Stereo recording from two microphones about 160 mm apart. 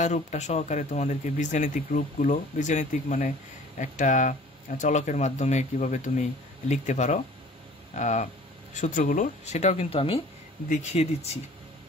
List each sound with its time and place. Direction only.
0.0 s speech: 45° left (ahead or behind)